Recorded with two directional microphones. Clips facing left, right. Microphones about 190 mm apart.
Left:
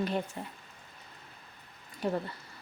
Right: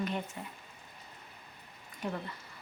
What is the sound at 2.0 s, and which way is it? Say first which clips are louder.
Speech: left 6 dB; 35° left (ahead or behind).